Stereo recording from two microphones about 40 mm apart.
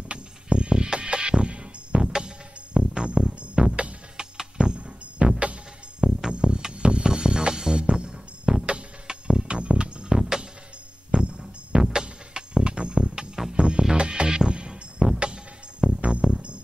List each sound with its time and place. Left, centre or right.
0.1 s music: right
3.6 s music: right
4.2 s music: centre
5.2 s music: right
5.9 s music: centre
6.3 s music: right